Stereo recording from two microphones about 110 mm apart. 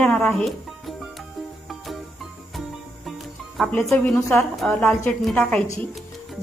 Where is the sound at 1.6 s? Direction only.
Centre (ahead or behind).